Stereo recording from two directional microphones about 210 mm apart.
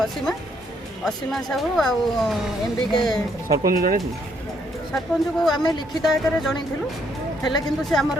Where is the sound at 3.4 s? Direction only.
40° right (ahead or behind).